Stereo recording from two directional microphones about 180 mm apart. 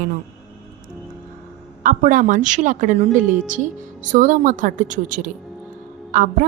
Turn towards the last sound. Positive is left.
turn(degrees=-45)  # may be behind; listen again after turning